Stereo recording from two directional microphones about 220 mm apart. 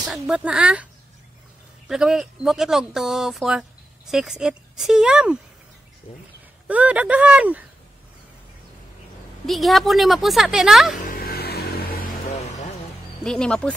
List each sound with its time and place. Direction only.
0.1 s speech: 5° right (ahead or behind)
1.9 s speech: centre (ahead or behind)
6.1 s speech: 25° left (ahead or behind)
6.7 s speech: 5° right (ahead or behind)
9.5 s speech: centre (ahead or behind)
11.1 s vehicle: 45° left (ahead or behind)
13.2 s speech: 5° left (ahead or behind)